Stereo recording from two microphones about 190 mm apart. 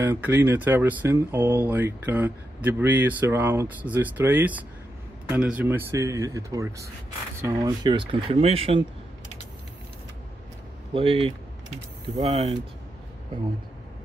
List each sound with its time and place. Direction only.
0.0 s speech: 10° right (ahead or behind); by 8.8 s 30° right (ahead or behind)
10.9 s speech: 30° right (ahead or behind)